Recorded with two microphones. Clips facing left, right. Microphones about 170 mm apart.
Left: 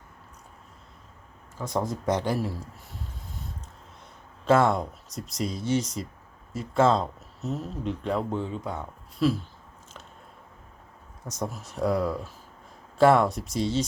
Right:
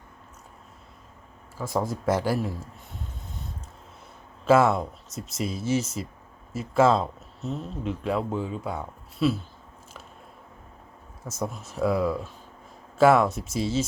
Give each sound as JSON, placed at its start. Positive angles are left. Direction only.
{"t": 1.5, "sound": "speech", "side_deg": -5}
{"t": 4.4, "sound": "speech", "side_deg": -5}
{"t": 11.3, "sound": "speech", "side_deg": 0}